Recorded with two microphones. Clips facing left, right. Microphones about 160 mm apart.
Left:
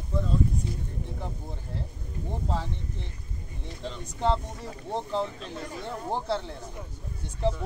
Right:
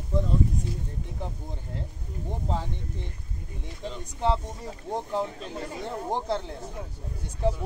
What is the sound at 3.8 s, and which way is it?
Speech, 5° right (ahead or behind).